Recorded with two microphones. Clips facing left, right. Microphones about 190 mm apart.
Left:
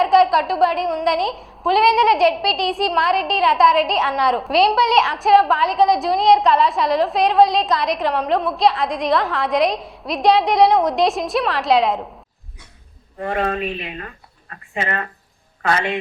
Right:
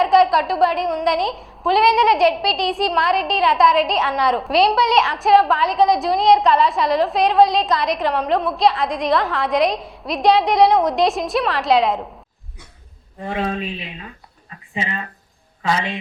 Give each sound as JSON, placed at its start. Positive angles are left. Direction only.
{"t": 0.0, "sound": "a woman's voice", "side_deg": 0}
{"t": 13.2, "sound": "speech", "side_deg": 55}